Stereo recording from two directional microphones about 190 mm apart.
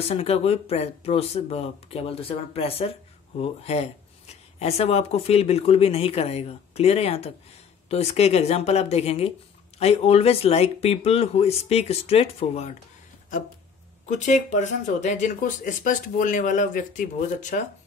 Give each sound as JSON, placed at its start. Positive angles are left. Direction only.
{"t": 0.1, "sound": "speech", "side_deg": 30}
{"t": 14.0, "sound": "speech", "side_deg": 40}